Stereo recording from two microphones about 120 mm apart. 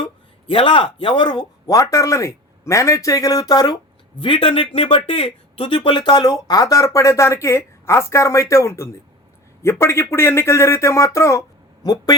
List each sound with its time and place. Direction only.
0.4 s speech: 45° left (ahead or behind)
4.2 s speech: 45° left (ahead or behind)